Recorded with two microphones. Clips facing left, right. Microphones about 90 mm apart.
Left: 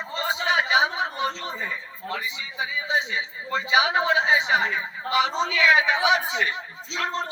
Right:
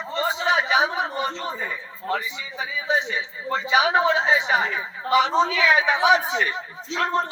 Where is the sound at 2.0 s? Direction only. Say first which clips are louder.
Right 5 dB; 45° right (ahead or behind).